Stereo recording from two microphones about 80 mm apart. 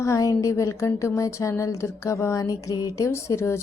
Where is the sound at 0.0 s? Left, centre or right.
Left.